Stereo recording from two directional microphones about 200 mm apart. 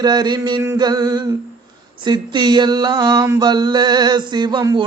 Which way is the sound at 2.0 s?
20° right (ahead or behind).